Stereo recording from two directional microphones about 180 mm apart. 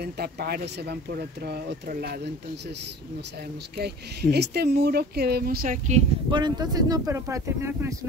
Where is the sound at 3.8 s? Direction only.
65° right (ahead or behind); by 6.0 s 45° right (ahead or behind).